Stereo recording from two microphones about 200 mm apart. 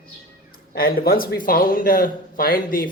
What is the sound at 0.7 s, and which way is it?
Speech, 50° left (ahead or behind).